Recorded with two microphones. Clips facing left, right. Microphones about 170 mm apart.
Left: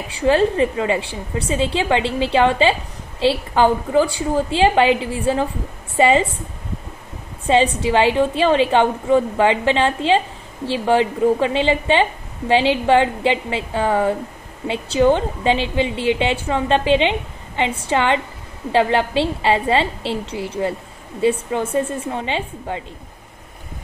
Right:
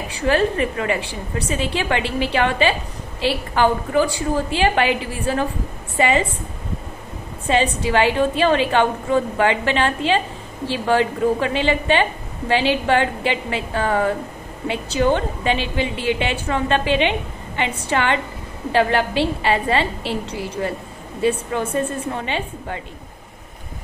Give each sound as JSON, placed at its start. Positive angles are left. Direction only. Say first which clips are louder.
{"t": 0.3, "sound": "a woman's voice", "louder": "left 3 dB", "side_deg": 20}
{"t": 7.4, "sound": "a woman's voice", "louder": "left 3 dB", "side_deg": 25}